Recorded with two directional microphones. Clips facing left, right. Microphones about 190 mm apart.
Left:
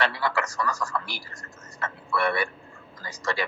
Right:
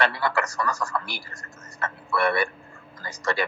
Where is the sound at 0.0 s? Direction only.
55° right (ahead or behind).